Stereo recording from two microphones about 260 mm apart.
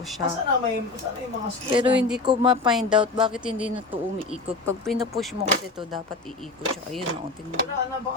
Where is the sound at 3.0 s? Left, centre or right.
Centre.